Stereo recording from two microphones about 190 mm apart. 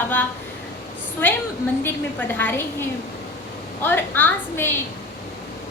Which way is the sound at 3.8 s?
10° left (ahead or behind).